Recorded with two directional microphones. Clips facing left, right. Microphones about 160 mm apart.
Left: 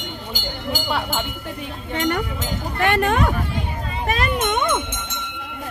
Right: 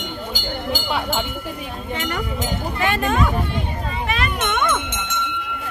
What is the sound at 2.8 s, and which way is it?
Speech, 65° left (ahead or behind).